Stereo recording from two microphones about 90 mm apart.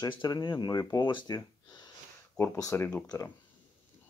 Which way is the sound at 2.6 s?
35° left (ahead or behind).